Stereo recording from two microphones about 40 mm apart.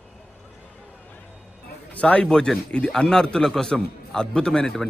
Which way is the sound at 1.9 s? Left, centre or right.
Left.